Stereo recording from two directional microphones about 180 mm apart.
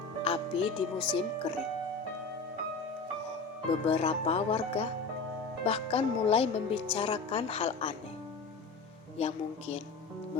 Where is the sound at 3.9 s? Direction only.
35° left (ahead or behind).